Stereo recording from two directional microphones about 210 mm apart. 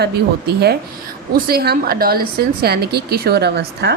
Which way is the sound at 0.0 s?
50° right (ahead or behind).